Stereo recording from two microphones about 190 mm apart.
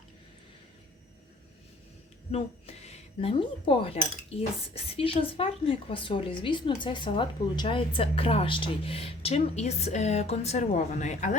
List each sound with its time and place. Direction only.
2.3 s speech: 35° left (ahead or behind)